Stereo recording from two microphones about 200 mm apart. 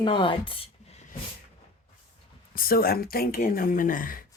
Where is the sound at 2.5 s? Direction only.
45° left (ahead or behind).